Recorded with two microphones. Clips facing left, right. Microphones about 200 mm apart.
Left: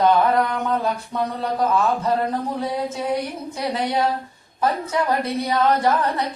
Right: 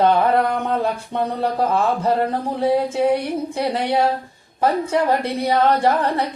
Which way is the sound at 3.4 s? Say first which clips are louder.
Right 3 dB; 30° right (ahead or behind).